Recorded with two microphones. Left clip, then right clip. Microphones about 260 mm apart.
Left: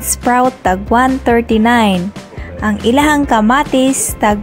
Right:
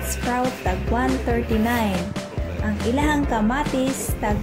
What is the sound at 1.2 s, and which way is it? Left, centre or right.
Music, left.